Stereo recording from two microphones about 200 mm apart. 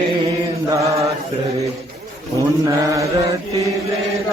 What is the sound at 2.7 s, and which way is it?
Chant, 15° right (ahead or behind).